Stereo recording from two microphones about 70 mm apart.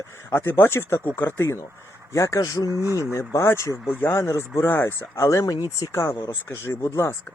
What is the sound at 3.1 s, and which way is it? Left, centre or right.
Speech, left.